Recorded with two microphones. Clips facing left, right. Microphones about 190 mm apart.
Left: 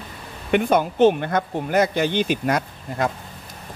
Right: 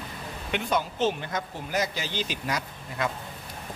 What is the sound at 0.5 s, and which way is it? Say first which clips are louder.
Speech: left 9 dB; 55° left (ahead or behind).